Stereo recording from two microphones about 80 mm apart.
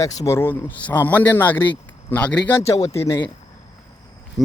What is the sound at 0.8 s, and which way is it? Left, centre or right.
Speech, left.